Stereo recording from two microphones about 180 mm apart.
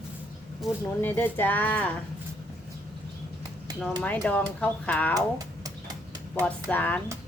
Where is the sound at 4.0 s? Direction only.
5° left (ahead or behind).